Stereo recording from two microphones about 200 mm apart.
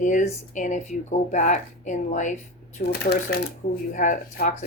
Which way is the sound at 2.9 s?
55° left (ahead or behind).